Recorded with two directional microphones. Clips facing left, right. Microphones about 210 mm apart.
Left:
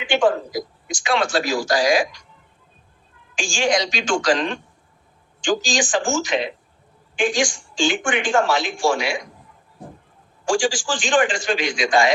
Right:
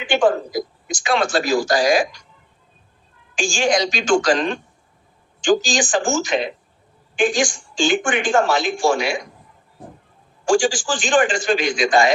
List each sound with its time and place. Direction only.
0.0 s a woman's voice: 45° right (ahead or behind)
3.3 s a woman's voice: 45° right (ahead or behind)
10.5 s a woman's voice: 45° right (ahead or behind)